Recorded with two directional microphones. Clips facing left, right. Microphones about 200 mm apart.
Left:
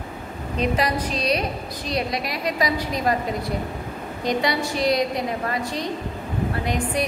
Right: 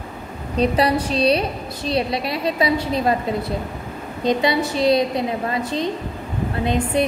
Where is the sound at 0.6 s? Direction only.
30° right (ahead or behind).